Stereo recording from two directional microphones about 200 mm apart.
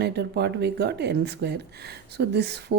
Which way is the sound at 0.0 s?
55° right (ahead or behind).